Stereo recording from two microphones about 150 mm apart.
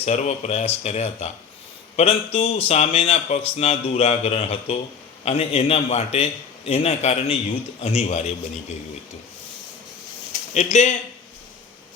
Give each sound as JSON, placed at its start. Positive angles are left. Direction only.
{"t": 0.0, "sound": "speech", "side_deg": 45}
{"t": 10.5, "sound": "speech", "side_deg": 50}